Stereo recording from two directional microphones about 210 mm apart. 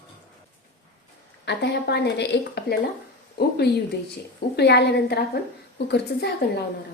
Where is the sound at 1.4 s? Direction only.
55° left (ahead or behind).